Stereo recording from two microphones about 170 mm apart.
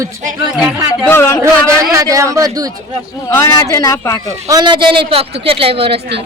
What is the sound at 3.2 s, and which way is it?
Speech, 15° left (ahead or behind).